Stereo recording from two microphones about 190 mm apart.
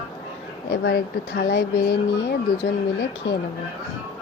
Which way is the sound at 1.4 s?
50° left (ahead or behind).